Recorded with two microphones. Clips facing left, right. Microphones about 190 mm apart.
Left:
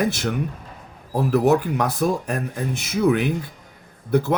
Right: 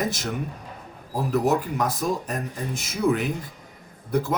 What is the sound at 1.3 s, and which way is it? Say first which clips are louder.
Speech: left 4 dB; 65° left (ahead or behind).